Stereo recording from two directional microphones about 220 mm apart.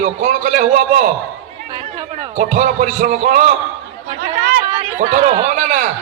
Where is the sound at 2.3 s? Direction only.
35° right (ahead or behind).